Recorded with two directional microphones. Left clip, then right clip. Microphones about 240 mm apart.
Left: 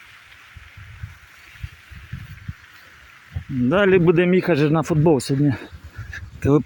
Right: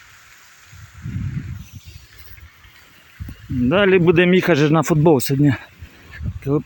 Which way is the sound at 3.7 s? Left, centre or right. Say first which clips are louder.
Right 1 dB; centre.